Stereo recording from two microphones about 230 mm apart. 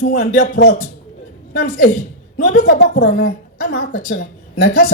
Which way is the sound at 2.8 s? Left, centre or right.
Left.